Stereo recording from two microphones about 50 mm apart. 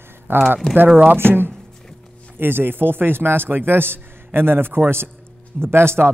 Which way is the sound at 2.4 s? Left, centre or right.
Right.